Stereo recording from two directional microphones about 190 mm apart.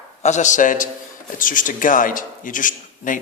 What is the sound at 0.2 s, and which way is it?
A man's voice, 40° left (ahead or behind).